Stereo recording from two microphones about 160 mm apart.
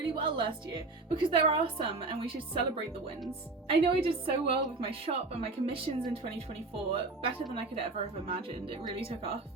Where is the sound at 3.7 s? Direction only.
35° right (ahead or behind).